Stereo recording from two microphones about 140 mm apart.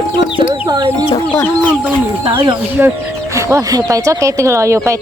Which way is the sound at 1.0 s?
30° left (ahead or behind).